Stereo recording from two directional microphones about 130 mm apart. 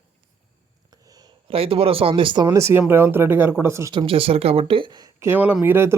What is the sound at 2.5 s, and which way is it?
Speech, 20° right (ahead or behind).